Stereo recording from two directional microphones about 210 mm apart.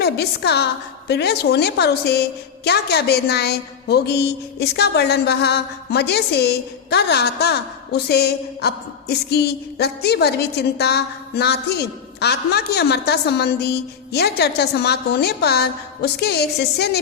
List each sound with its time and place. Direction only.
0.0 s a woman's voice: 50° left (ahead or behind)